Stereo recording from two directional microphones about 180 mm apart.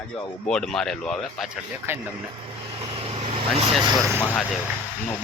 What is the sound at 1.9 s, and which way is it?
Speech, 15° right (ahead or behind).